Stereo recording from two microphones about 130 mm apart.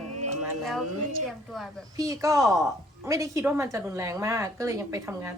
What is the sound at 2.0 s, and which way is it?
A woman's voice, 25° right (ahead or behind).